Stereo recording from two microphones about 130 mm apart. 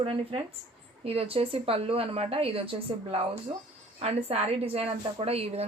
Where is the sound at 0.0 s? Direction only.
45° right (ahead or behind).